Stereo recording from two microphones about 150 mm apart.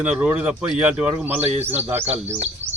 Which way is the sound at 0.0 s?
10° right (ahead or behind).